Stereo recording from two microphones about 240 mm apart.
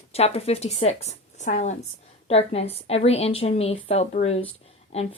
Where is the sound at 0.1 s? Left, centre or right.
Left.